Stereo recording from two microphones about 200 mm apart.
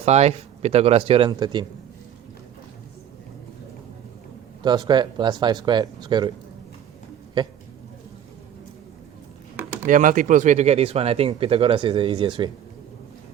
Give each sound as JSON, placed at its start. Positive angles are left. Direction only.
{"t": 0.0, "sound": "speech", "side_deg": -35}
{"t": 4.6, "sound": "speech", "side_deg": -20}
{"t": 9.8, "sound": "speech", "side_deg": -40}